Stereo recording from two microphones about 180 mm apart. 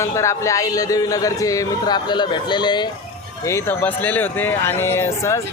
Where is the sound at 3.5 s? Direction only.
15° left (ahead or behind).